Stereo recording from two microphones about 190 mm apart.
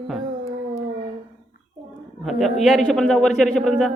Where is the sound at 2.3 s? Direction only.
Centre (ahead or behind).